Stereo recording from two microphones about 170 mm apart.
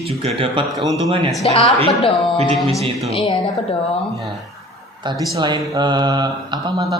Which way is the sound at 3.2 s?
25° left (ahead or behind).